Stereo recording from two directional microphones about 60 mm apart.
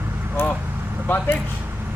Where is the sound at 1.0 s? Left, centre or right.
Left.